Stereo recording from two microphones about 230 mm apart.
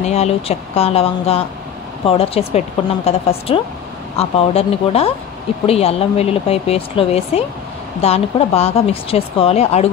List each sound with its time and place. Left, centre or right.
0.0 s speech: left